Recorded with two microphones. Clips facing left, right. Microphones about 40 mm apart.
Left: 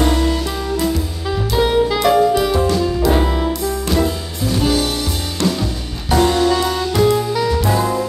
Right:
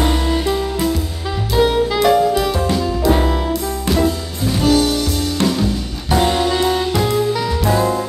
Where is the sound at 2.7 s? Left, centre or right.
Centre.